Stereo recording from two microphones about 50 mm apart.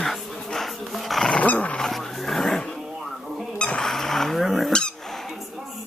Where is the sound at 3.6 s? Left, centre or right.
Left.